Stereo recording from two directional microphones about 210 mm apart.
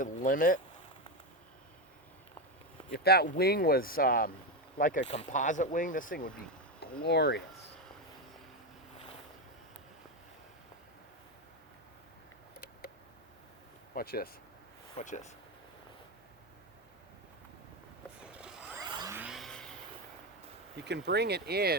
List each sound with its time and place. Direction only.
0.0 s speech: 40° left (ahead or behind)
2.9 s speech: 50° left (ahead or behind)
13.9 s speech: 45° left (ahead or behind)
14.9 s speech: 35° left (ahead or behind)
18.2 s zipper: 5° right (ahead or behind)
18.8 s a sound: 20° right (ahead or behind)
19.1 s vehicle: 5° right (ahead or behind)
20.7 s speech: 55° right (ahead or behind)